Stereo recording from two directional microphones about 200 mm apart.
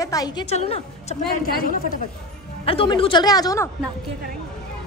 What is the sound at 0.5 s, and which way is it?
Speech, 30° left (ahead or behind).